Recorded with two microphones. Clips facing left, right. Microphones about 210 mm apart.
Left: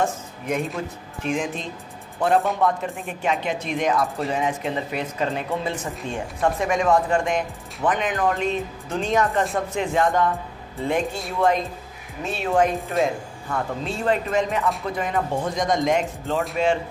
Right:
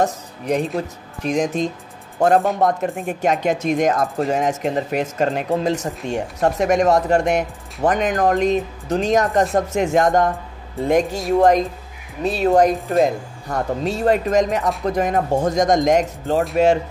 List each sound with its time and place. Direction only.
0.0 s speech: 35° right (ahead or behind)
12.7 s speech: centre (ahead or behind)
13.0 s speech: 40° right (ahead or behind)